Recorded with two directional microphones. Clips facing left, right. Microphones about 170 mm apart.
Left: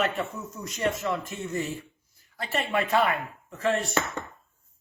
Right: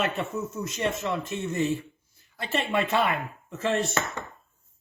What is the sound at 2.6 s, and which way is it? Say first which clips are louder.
Speech: even; 25° right (ahead or behind).